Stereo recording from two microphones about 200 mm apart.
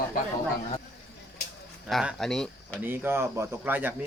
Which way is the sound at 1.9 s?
Centre (ahead or behind).